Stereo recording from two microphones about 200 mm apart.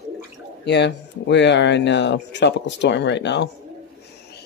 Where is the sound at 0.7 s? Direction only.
60° left (ahead or behind).